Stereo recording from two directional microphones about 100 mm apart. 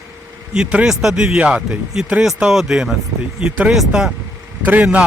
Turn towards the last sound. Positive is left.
turn(degrees=-15)  # may be behind; listen again after turning